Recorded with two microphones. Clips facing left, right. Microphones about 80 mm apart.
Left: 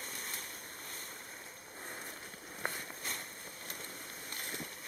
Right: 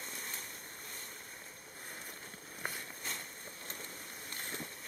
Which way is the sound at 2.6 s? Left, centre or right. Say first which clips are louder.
Left 2 dB; centre.